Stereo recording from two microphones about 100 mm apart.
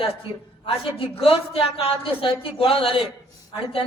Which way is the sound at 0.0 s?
60° left (ahead or behind).